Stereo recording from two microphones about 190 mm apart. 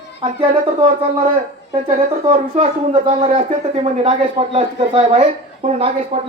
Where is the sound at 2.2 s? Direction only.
35° right (ahead or behind).